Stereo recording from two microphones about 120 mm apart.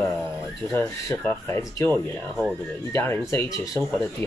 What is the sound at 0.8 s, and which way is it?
Speech, 20° left (ahead or behind).